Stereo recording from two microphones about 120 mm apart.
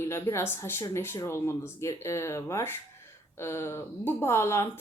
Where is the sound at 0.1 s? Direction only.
20° left (ahead or behind).